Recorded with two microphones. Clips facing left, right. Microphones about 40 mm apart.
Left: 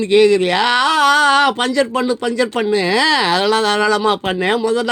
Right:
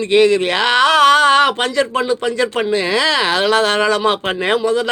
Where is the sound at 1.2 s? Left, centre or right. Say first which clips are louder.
Right 1 dB; right.